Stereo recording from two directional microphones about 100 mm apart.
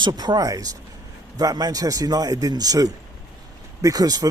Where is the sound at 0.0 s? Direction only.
45° right (ahead or behind).